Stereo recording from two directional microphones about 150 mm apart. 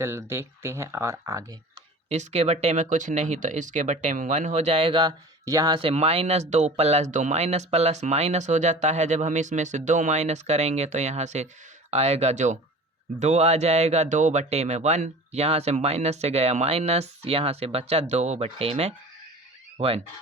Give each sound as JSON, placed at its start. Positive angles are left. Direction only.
{"t": 0.0, "sound": "speech", "side_deg": -15}
{"t": 2.0, "sound": "speech", "side_deg": -50}